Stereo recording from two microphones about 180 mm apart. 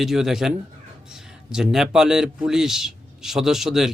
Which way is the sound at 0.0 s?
Centre (ahead or behind).